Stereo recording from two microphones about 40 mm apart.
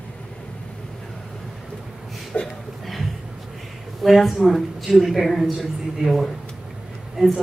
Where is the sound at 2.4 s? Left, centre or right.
Centre.